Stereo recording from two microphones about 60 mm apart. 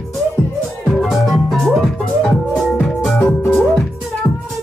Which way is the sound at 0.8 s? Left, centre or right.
Centre.